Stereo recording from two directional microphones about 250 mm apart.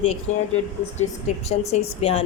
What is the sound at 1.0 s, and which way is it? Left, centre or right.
A woman's voice, left.